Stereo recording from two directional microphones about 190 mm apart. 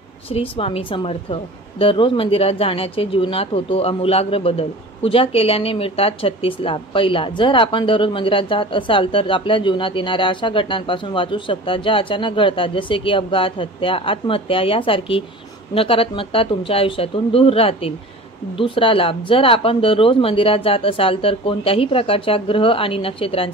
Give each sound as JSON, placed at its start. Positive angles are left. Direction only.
{"t": 0.3, "sound": "a woman's voice", "side_deg": 30}